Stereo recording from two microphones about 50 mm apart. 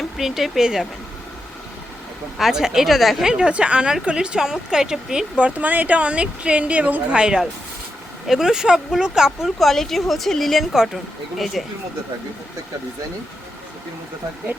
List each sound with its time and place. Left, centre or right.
0.0 s speech: centre
2.4 s speech: centre
3.2 s speech: centre
5.5 s speech: right; by 9.5 s centre
9.6 s speech: centre